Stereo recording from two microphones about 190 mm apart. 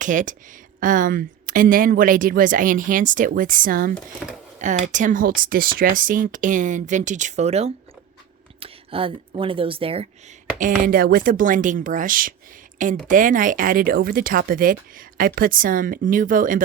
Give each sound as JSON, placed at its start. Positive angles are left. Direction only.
{"t": 0.0, "sound": "a woman's voice", "side_deg": -40}
{"t": 3.9, "sound": "speech", "side_deg": 0}
{"t": 4.6, "sound": "a woman's voice", "side_deg": -40}
{"t": 10.6, "sound": "a woman's voice", "side_deg": -50}